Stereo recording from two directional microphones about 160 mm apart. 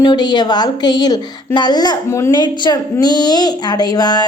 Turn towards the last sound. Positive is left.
turn(degrees=25)  # may be behind; listen again after turning